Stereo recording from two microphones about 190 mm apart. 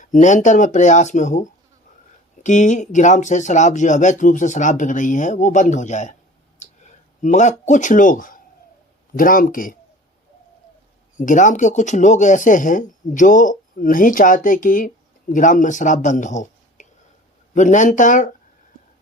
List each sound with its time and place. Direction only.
0.0 s speech: 40° left (ahead or behind)
11.2 s speech: 40° left (ahead or behind)